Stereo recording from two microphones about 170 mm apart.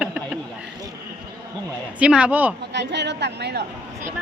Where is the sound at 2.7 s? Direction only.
90° right.